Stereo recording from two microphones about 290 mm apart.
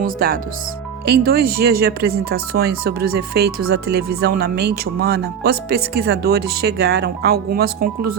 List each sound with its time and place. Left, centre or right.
0.0 s speech: right